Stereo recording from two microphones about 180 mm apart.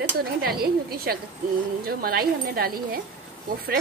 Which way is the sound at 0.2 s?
60° right (ahead or behind).